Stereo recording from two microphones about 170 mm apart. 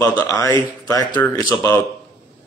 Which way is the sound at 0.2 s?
15° left (ahead or behind).